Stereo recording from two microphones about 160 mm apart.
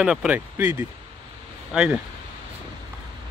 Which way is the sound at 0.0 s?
5° right (ahead or behind).